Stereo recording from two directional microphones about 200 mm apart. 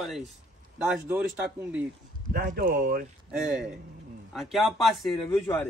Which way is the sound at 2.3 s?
50° right (ahead or behind).